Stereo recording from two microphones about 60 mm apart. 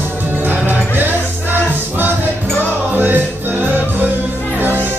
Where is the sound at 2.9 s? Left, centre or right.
Right.